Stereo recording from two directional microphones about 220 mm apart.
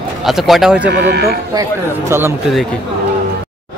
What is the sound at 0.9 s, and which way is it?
Speech, 50° right (ahead or behind).